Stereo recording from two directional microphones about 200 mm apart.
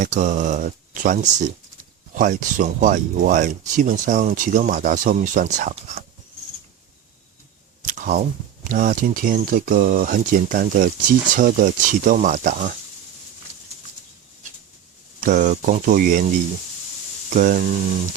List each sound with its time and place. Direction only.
0.0 s speech: 40° right (ahead or behind)
7.8 s a sound: 40° right (ahead or behind)
8.7 s speech: 40° right (ahead or behind)
15.2 s speech: 40° right (ahead or behind)